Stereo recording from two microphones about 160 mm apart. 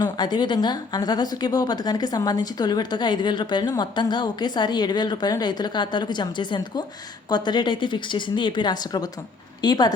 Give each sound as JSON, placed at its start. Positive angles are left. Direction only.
{"t": 0.0, "sound": "speech", "side_deg": 25}